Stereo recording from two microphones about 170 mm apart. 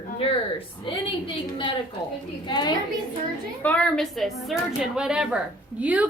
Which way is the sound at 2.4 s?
25° left (ahead or behind).